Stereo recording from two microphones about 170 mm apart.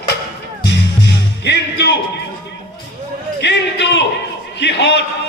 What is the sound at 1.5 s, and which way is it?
Music, 90° left.